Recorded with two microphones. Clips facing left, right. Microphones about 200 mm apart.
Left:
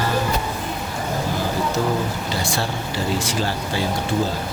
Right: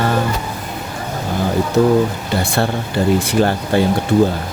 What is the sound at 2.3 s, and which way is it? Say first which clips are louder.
A woman's voice: right 6 dB; 60° right (ahead or behind).